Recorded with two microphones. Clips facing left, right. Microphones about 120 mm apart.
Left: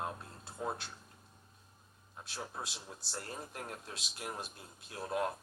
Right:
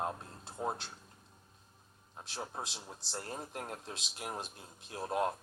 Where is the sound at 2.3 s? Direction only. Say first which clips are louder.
Right 2 dB; 25° right (ahead or behind).